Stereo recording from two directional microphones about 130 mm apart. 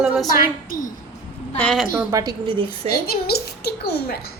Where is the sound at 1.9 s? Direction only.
25° right (ahead or behind).